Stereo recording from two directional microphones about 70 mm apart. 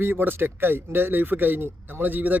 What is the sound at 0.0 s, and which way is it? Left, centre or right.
A man's voice, right.